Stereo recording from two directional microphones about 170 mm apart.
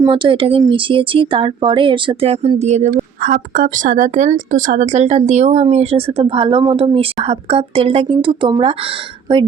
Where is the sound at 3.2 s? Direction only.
55° right (ahead or behind); by 9.4 s 30° right (ahead or behind).